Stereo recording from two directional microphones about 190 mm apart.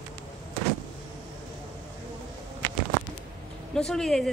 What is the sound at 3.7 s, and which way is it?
Speech, 5° left (ahead or behind).